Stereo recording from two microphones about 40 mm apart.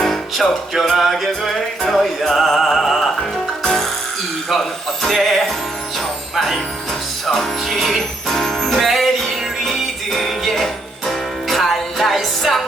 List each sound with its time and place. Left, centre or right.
0.0 s music: centre
3.6 s music: centre
5.0 s music: centre